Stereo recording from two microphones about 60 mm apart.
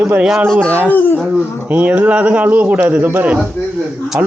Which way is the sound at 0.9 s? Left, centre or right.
Left.